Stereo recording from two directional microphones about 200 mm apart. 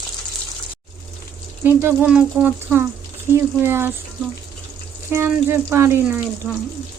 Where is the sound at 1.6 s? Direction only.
10° right (ahead or behind).